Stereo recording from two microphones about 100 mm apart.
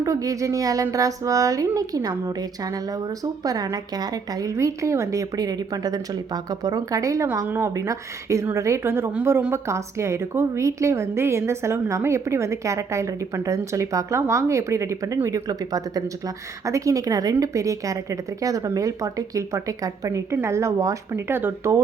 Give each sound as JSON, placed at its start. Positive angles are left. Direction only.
{"t": 0.0, "sound": "a woman's voice", "side_deg": -35}
{"t": 7.4, "sound": "a woman's voice", "side_deg": -25}